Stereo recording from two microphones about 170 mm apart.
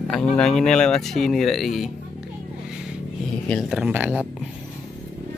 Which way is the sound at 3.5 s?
Centre (ahead or behind).